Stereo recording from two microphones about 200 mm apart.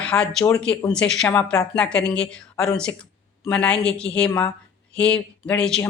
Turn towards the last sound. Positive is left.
turn(degrees=5)  # may be behind; listen again after turning